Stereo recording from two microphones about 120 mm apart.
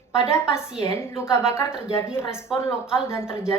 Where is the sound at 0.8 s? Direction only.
25° left (ahead or behind).